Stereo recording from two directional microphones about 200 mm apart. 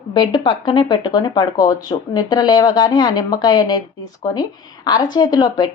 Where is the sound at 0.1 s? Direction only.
20° left (ahead or behind).